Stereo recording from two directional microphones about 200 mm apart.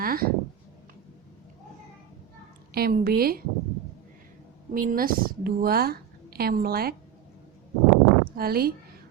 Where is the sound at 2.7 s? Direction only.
50° right (ahead or behind).